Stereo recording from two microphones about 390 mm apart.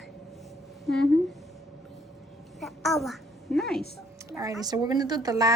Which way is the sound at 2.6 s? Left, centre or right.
Centre.